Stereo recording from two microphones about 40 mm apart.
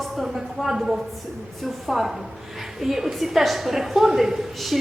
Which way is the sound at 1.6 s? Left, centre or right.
Centre.